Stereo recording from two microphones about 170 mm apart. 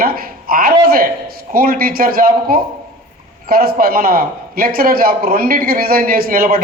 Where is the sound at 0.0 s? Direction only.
60° right (ahead or behind).